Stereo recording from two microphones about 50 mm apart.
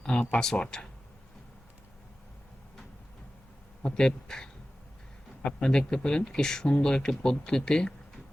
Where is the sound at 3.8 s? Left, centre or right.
Centre.